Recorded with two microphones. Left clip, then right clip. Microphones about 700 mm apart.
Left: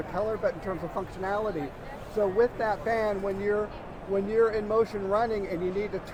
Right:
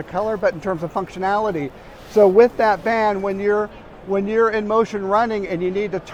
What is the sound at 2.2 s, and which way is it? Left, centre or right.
Speech, right.